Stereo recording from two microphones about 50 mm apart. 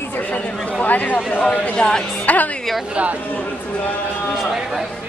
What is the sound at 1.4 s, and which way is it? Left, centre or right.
Speech, centre.